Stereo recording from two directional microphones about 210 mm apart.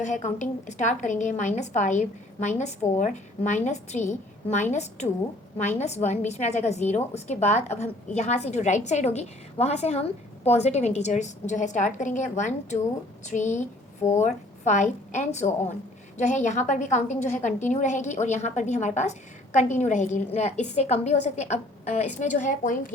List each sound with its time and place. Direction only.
0.0 s a woman's voice: 35° left (ahead or behind)